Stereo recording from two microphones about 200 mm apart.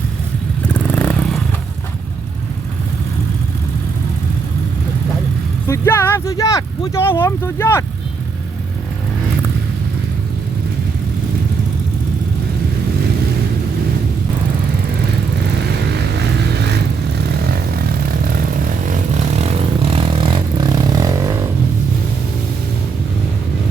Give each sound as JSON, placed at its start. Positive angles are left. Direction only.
{"t": 0.7, "sound": "vehicle", "side_deg": 10}
{"t": 5.6, "sound": "speech", "side_deg": 15}
{"t": 16.1, "sound": "vehicle", "side_deg": -55}
{"t": 18.9, "sound": "vehicle", "side_deg": -35}